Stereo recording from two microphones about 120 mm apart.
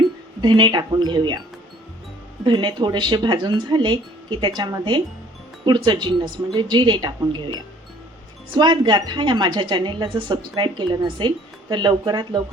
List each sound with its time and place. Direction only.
0.4 s a woman's voice: 40° right (ahead or behind)
2.4 s a woman's voice: 40° right (ahead or behind)